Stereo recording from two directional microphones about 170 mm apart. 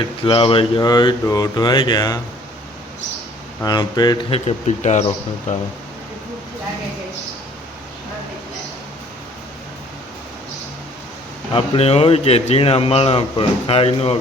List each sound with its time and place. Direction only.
0.3 s a man's voice: 30° left (ahead or behind)
3.6 s a man's voice: 25° left (ahead or behind); by 5.5 s 40° left (ahead or behind)
11.5 s a man's voice: 35° left (ahead or behind)